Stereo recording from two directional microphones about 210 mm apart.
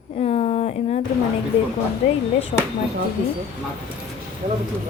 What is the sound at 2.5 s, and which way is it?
Speech, 35° left (ahead or behind).